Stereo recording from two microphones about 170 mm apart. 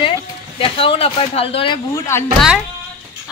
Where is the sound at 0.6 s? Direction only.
30° left (ahead or behind).